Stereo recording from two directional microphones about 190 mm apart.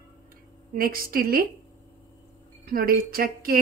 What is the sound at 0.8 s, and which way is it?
Speech, 50° right (ahead or behind).